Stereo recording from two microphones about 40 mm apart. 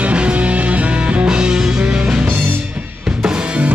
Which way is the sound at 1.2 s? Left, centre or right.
Right.